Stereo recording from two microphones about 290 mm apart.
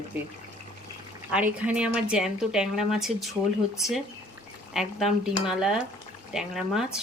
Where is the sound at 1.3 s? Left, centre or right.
Centre.